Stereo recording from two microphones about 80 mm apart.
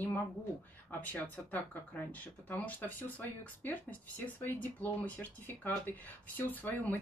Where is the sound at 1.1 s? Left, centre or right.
Left.